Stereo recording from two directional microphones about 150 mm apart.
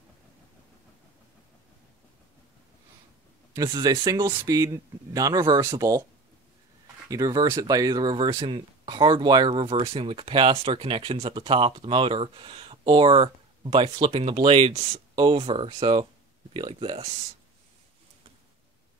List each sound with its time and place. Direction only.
3.5 s speech: 30° right (ahead or behind)
7.1 s speech: 25° right (ahead or behind)